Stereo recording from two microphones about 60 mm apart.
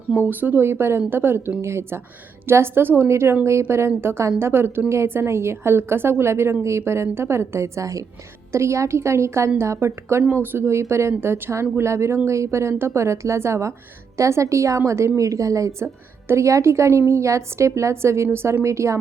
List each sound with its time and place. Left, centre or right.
0.2 s a woman's voice: right
8.5 s a woman's voice: right
10.4 s a woman's voice: right
16.2 s a woman's voice: right